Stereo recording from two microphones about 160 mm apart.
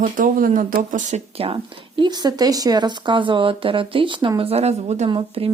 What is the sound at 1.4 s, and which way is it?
A woman's voice, 35° right (ahead or behind).